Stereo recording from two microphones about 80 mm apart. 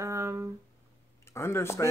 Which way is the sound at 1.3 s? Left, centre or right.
Left.